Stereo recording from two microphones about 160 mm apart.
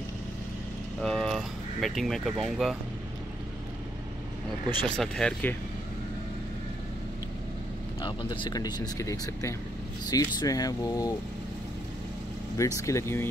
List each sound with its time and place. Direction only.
1.0 s vehicle: 5° left (ahead or behind)
4.6 s speech: 5° left (ahead or behind)
8.0 s speech: 30° left (ahead or behind)
12.5 s speech: 20° left (ahead or behind)